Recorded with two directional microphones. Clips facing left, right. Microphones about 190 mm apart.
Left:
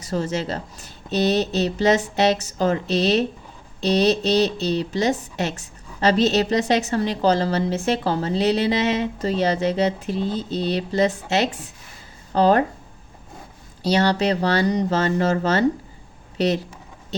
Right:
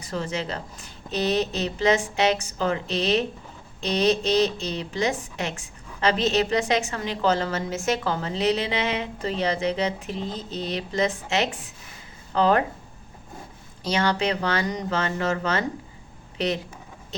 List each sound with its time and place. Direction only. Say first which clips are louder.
0.0 s a woman's voice: left 5 dB; 40° left (ahead or behind)
13.8 s a woman's voice: left 5 dB; 35° left (ahead or behind)